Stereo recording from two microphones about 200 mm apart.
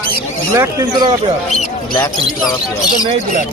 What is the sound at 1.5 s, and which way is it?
Speech, 35° left (ahead or behind).